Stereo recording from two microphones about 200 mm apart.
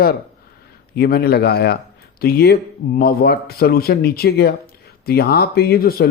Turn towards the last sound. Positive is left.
turn(degrees=50)  # may be behind; listen again after turning